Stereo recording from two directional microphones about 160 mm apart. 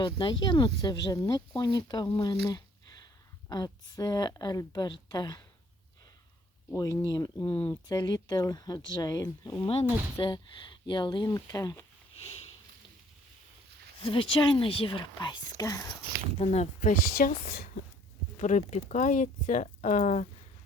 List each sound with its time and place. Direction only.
0.0 s speech: 30° left (ahead or behind)
6.7 s speech: 20° left (ahead or behind)
7.3 s speech: 10° left (ahead or behind)
7.7 s speech: 25° left (ahead or behind)
14.0 s speech: 35° left (ahead or behind)
16.4 s a woman's voice: 45° left (ahead or behind); by 17.8 s 65° left (ahead or behind)
18.3 s speech: 50° left (ahead or behind)